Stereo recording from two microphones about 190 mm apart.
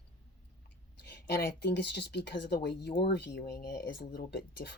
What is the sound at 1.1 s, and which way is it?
Speech, 60° left (ahead or behind).